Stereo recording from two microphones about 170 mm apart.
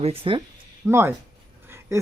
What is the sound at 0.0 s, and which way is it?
Speech, 35° right (ahead or behind).